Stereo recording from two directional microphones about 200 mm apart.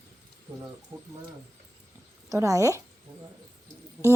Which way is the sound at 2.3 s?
15° right (ahead or behind).